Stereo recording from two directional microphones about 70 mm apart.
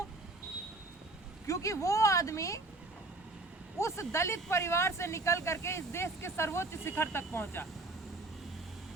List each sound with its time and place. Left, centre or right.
1.5 s speech: left
3.8 s speech: left